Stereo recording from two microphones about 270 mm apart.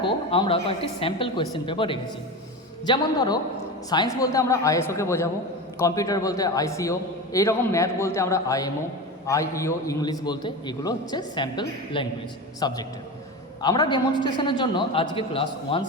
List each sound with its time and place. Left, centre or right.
0.0 s a woman's voice: centre